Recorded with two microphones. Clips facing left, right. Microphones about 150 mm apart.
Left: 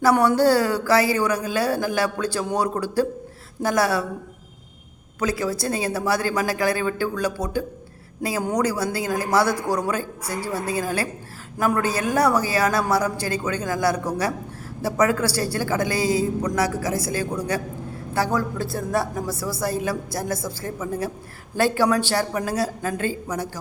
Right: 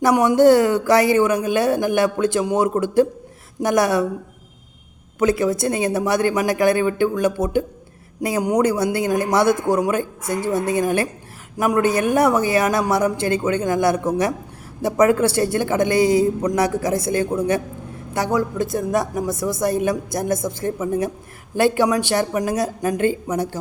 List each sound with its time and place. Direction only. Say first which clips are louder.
0.0 s speech: right 4 dB; 15° right (ahead or behind)
5.2 s speech: right 6 dB; 25° right (ahead or behind)
16.0 s a sound: right 8 dB; 30° left (ahead or behind)
16.4 s a woman's voice: right 4 dB; 25° right (ahead or behind)